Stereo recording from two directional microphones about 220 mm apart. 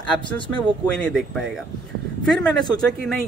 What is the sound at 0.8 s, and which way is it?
Speech, 5° left (ahead or behind).